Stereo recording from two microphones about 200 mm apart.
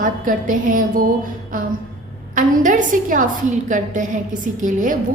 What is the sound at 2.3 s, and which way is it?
A woman's voice, 40° right (ahead or behind).